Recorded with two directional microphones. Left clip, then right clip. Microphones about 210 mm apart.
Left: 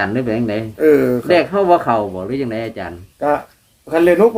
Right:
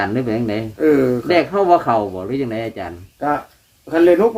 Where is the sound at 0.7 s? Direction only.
25° left (ahead or behind).